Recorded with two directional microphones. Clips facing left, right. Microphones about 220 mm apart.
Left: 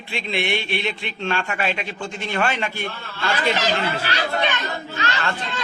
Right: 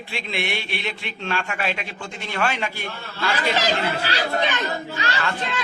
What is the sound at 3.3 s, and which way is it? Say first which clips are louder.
Speech: left 1 dB; 30° right (ahead or behind).